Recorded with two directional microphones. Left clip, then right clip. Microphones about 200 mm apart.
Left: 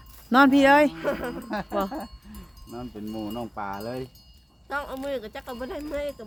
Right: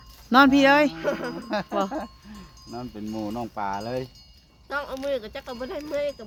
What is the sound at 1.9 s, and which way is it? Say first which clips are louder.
Speech: right 3 dB; 65° right (ahead or behind).